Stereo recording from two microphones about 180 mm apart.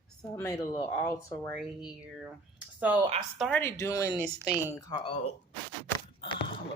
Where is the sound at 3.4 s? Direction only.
5° left (ahead or behind).